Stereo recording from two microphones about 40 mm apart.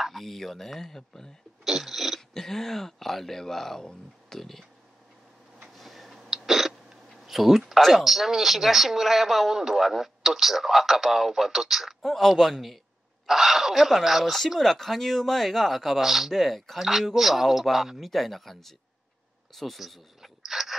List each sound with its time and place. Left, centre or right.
0.0 s speech: centre
1.6 s speech: centre
2.1 s speech: centre
5.8 s tick-tock: centre
6.2 s a man's voice: centre
14.6 s a man's voice: centre
20.2 s a sound: centre